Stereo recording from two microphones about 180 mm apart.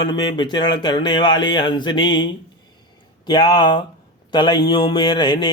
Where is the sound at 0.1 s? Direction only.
25° left (ahead or behind).